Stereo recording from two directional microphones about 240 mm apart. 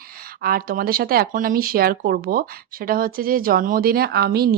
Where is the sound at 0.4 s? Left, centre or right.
Right.